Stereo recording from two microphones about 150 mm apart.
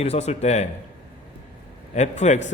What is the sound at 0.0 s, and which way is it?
Speech, 45° left (ahead or behind).